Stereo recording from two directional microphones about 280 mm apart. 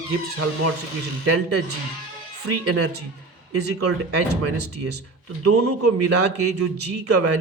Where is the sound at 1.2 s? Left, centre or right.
Right.